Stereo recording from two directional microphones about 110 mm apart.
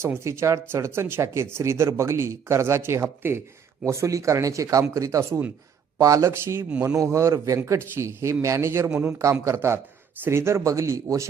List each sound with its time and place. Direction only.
0.0 s speech: 25° right (ahead or behind)
8.9 s a man's voice: 10° right (ahead or behind)
9.1 s speech: 25° right (ahead or behind)